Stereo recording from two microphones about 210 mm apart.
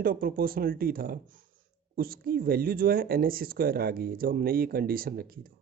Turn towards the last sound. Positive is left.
turn(degrees=-45)  # may be behind; listen again after turning